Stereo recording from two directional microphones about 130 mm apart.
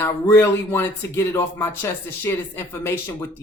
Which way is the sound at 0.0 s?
20° left (ahead or behind).